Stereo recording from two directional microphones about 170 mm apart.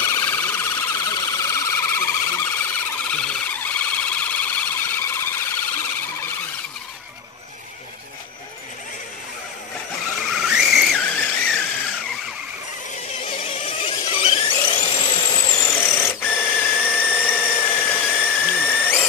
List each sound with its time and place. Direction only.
0.0 s police car: 15° left (ahead or behind)
3.1 s a sound: 5° left (ahead or behind)
10.3 s skidding: 5° right (ahead or behind)
11.0 s squeal: 10° left (ahead or behind)
13.3 s squeal: 30° left (ahead or behind); by 19.0 s 10° left (ahead or behind)